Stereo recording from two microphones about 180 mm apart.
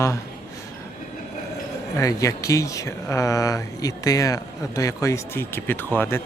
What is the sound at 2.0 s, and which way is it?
Speech, 20° left (ahead or behind).